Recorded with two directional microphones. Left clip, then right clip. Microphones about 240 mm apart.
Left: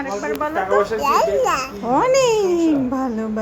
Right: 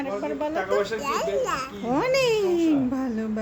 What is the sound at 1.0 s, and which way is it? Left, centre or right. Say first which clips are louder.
Speech: left 9 dB; centre.